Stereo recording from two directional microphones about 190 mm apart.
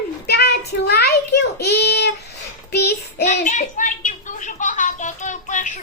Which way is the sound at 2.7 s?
60° left (ahead or behind).